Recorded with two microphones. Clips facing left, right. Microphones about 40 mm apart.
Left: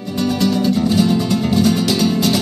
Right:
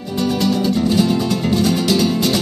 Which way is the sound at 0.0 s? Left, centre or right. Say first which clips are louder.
Left 1 dB; centre.